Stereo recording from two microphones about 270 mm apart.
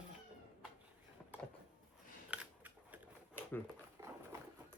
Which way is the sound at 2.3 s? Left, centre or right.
Centre.